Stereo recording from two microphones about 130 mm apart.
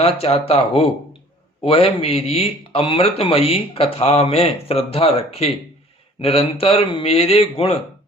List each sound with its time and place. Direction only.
0.0 s speech: 50° left (ahead or behind)